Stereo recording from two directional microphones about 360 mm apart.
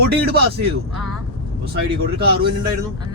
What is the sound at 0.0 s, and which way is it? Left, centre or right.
Speech, right.